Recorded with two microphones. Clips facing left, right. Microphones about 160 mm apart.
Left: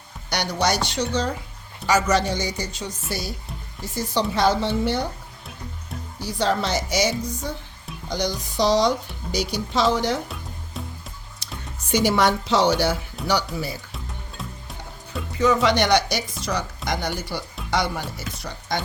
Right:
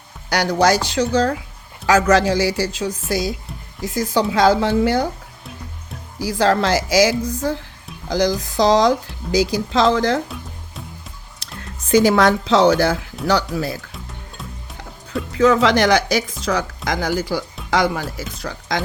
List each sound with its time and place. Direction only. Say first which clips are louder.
0.3 s speech: right 7 dB; 90° right
6.1 s speech: right 6 dB; 90° right
10.2 s music: right 3 dB; centre (ahead or behind)
12.2 s speech: right 5 dB; 90° right
15.3 s speech: right 5 dB; 90° right